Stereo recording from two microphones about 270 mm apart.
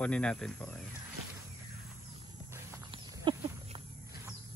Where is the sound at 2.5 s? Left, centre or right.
Centre.